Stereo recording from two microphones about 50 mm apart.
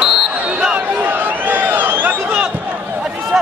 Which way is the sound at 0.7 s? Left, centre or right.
Right.